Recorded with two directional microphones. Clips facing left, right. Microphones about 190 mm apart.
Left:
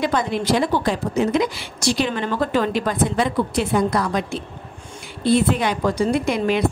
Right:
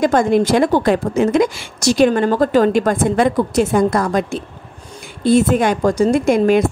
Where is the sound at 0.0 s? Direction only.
45° right (ahead or behind).